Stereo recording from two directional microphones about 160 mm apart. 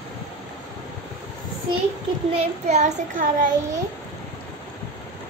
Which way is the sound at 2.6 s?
45° right (ahead or behind).